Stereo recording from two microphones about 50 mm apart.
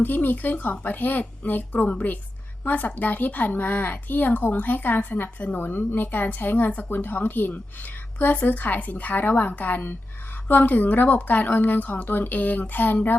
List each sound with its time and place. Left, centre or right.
0.0 s a woman's voice: left